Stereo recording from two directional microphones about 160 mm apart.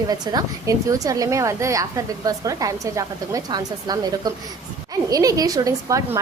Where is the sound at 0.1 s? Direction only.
20° right (ahead or behind).